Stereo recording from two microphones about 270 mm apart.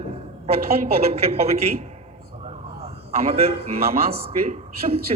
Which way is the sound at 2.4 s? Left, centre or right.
Right.